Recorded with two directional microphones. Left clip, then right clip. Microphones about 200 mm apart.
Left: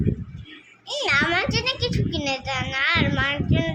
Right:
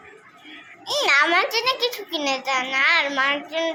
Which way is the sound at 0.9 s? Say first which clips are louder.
Right 3 dB; 10° left (ahead or behind).